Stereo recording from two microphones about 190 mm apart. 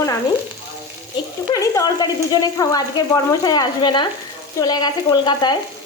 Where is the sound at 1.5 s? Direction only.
20° left (ahead or behind).